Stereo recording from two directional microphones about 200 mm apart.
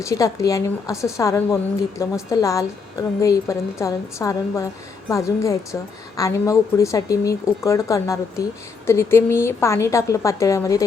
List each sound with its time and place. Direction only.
0.0 s a woman's voice: 15° left (ahead or behind)